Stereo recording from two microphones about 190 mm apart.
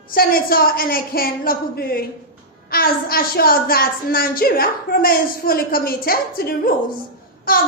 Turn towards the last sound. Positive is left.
turn(degrees=50)  # may be behind; listen again after turning